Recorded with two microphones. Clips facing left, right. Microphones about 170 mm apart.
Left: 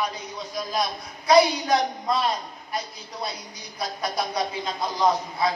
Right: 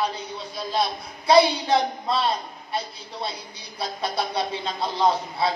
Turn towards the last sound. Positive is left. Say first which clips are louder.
# even
turn(degrees=-30)  # may be behind; listen again after turning